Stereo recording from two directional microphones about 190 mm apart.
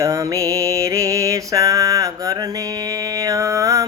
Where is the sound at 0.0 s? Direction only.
15° right (ahead or behind).